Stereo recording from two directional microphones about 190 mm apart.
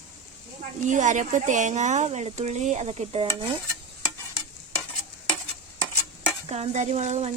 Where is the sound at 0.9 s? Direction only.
40° right (ahead or behind).